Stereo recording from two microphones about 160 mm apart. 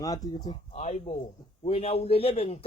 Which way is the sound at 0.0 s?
25° left (ahead or behind).